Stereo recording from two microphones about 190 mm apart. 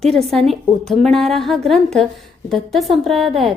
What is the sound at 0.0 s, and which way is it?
A woman's voice, centre (ahead or behind).